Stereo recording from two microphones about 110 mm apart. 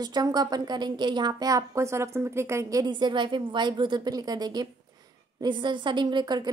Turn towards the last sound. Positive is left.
turn(degrees=-40)  # may be behind; listen again after turning